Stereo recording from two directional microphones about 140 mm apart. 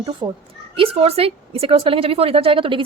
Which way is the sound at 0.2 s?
35° right (ahead or behind).